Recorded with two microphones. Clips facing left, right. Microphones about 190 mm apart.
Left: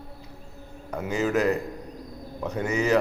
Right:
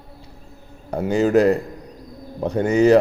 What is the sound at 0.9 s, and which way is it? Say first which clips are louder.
A man's voice: right 8 dB; 30° right (ahead or behind).